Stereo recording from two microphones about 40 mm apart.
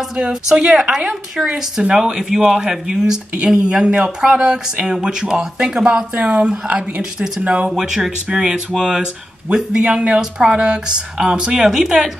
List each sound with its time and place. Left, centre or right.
0.1 s speech: centre
6.1 s speech: right; by 12.1 s centre